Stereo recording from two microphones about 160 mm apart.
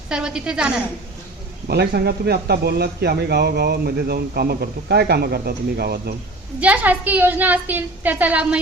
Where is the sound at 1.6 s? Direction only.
85° right.